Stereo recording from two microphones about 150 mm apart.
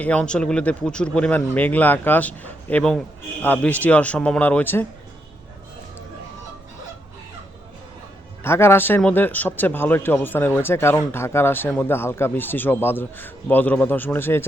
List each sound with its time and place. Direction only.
0.0 s speech: 5° left (ahead or behind)
8.4 s speech: 15° left (ahead or behind)